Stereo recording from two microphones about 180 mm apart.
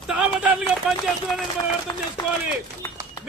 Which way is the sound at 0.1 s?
5° right (ahead or behind).